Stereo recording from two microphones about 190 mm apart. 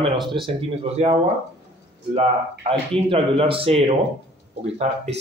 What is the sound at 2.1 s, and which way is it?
A man's voice, 30° right (ahead or behind).